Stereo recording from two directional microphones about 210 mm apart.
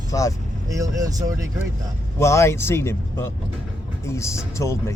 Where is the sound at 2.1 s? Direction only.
15° left (ahead or behind).